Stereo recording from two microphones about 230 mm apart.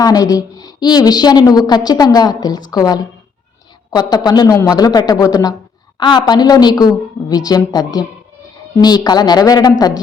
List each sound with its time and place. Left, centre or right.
0.0 s a woman's voice: centre